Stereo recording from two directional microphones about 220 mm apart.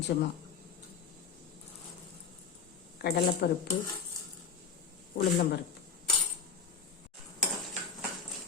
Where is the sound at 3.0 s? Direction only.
45° left (ahead or behind).